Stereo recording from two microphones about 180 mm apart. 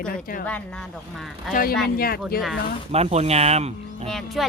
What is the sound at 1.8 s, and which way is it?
Speech, 55° left (ahead or behind).